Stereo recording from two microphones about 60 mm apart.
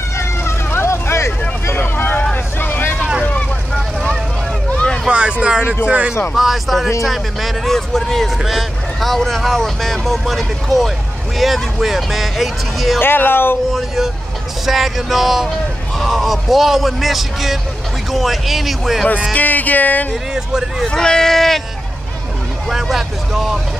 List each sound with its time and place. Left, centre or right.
0.2 s vehicle: left
1.8 s boat: left
2.3 s vehicle: left
4.7 s vehicle: centre
5.9 s speech: centre
6.3 s speech: centre
13.0 s speech: left
13.7 s speech: centre
19.3 s speech: left
20.8 s speech: centre
22.7 s speech: centre